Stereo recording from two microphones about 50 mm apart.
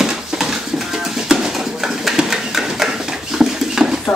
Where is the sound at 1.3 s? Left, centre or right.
Centre.